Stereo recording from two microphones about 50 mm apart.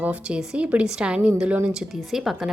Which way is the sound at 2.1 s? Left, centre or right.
Centre.